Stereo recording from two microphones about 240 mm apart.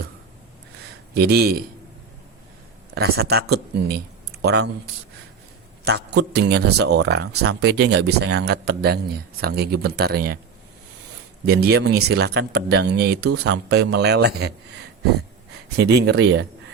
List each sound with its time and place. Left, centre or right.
1.1 s speech: right
2.9 s speech: right
5.8 s speech: right
11.4 s speech: right